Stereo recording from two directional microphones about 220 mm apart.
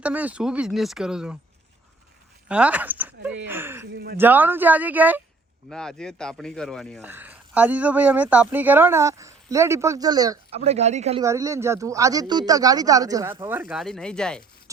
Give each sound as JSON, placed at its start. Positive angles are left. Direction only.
{"t": 0.0, "sound": "speech", "side_deg": -5}
{"t": 2.5, "sound": "speech", "side_deg": -5}
{"t": 3.9, "sound": "speech", "side_deg": -45}
{"t": 4.2, "sound": "speech", "side_deg": -10}
{"t": 7.0, "sound": "speech", "side_deg": -10}
{"t": 10.6, "sound": "speech", "side_deg": -30}
{"t": 11.2, "sound": "speech", "side_deg": -15}
{"t": 13.8, "sound": "speech", "side_deg": 5}